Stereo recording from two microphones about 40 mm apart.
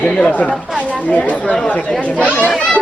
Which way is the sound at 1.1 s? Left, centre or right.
Left.